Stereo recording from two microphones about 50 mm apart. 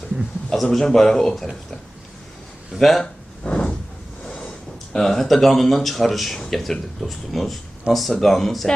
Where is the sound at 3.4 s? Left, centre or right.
Left.